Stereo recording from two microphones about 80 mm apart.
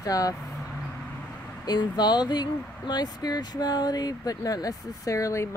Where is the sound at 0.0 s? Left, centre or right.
Left.